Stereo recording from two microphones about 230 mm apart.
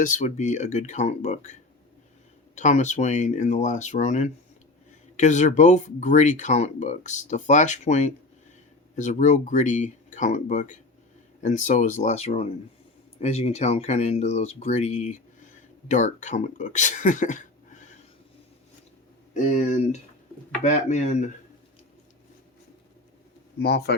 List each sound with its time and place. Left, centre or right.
0.0 s speech: left
2.6 s speech: left
19.5 s speech: left
23.6 s speech: left